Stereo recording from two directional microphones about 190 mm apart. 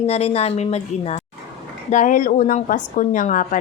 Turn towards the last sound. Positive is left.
turn(degrees=45)  # may be behind; listen again after turning